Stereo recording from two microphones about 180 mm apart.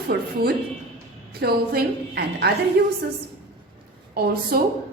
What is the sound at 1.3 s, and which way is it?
A woman's voice, 60° right (ahead or behind).